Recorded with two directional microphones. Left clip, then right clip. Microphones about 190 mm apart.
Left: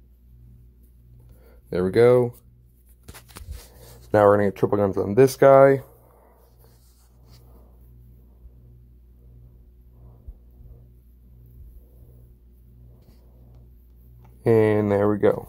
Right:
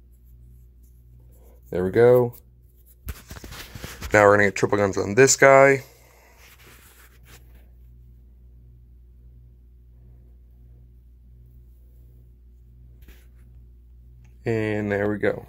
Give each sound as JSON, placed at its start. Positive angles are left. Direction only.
{"t": 1.4, "sound": "speech", "side_deg": 0}
{"t": 4.1, "sound": "speech", "side_deg": 10}
{"t": 14.2, "sound": "a sound", "side_deg": 20}